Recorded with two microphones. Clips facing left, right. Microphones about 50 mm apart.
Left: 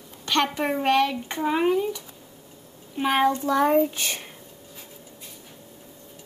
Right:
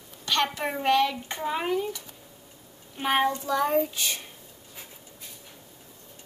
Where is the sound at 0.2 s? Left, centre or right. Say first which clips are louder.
Left 3 dB; left.